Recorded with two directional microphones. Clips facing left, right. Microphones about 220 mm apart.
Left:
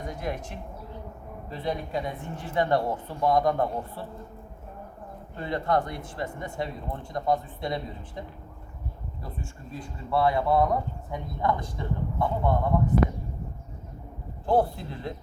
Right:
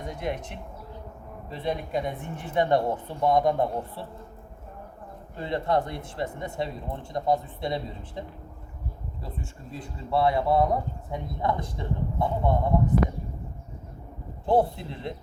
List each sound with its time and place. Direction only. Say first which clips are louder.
0.1 s speech: right 3 dB; 25° right (ahead or behind)
5.4 s speech: right 1 dB; 25° right (ahead or behind)
9.2 s speech: even; 25° right (ahead or behind)
14.4 s speech: right 1 dB; 20° right (ahead or behind)